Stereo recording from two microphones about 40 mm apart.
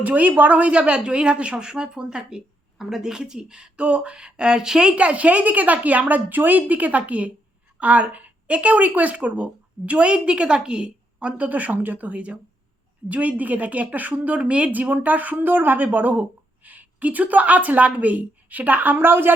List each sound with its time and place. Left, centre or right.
0.0 s a woman's voice: right
0.7 s speech: right
4.9 s a woman's voice: right
11.4 s a woman's voice: right
15.4 s a woman's voice: right
18.9 s speech: right